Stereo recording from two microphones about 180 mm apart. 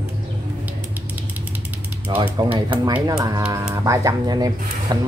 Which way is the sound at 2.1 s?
25° right (ahead or behind).